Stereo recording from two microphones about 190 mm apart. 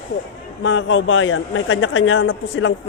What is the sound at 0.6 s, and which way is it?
A man's voice, 75° left (ahead or behind).